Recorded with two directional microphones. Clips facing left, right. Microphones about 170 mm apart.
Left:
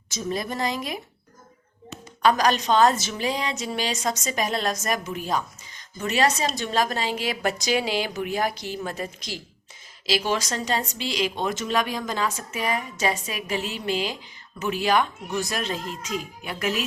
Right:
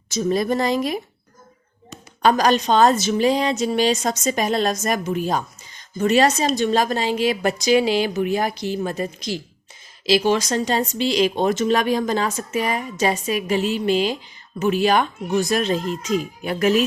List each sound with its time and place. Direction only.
0.3 s a woman's voice: 35° right (ahead or behind)
2.2 s a woman's voice: 30° right (ahead or behind)
10.1 s a woman's voice: 25° right (ahead or behind)